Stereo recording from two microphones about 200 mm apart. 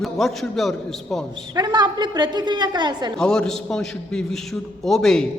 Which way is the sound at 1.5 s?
20° right (ahead or behind).